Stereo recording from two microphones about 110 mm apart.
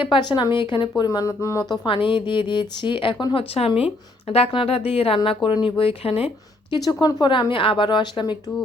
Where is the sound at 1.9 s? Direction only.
50° left (ahead or behind).